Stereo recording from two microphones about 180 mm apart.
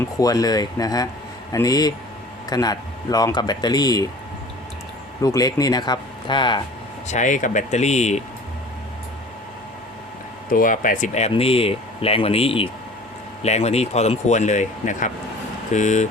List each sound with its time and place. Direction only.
0.0 s speech: 20° left (ahead or behind)
5.2 s speech: 20° left (ahead or behind)
7.1 s speech: 45° left (ahead or behind)
10.5 s speech: 50° left (ahead or behind)